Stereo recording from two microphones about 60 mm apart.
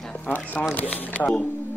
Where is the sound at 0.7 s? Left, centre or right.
Left.